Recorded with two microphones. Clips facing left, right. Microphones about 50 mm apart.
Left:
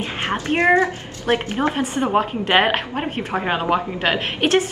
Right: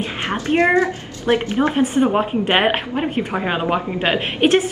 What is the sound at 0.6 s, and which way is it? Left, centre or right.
A woman's voice, left.